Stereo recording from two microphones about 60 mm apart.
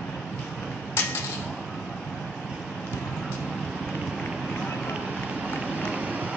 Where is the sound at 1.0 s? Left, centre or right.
Left.